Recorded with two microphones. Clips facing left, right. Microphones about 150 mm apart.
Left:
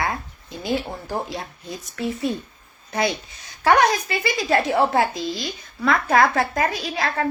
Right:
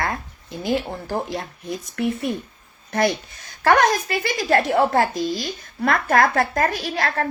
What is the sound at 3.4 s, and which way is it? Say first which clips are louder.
A woman's voice: even; 50° right (ahead or behind).